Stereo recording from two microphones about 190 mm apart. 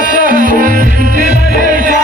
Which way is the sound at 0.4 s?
45° right (ahead or behind).